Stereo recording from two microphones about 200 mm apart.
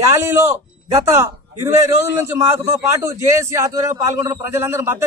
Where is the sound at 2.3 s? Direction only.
15° right (ahead or behind).